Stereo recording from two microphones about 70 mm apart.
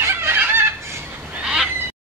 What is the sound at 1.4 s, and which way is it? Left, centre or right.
Neigh, centre.